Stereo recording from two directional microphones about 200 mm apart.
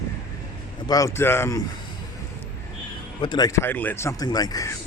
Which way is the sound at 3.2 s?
20° left (ahead or behind).